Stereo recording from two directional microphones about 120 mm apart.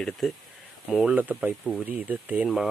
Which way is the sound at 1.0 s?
10° right (ahead or behind).